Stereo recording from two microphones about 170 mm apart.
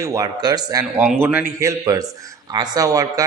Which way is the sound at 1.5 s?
20° right (ahead or behind).